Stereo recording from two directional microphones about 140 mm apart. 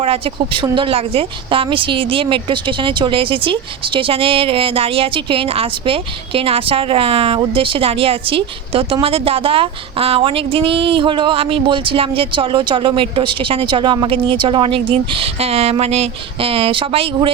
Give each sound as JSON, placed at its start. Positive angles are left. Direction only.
{"t": 0.0, "sound": "a woman's voice", "side_deg": -40}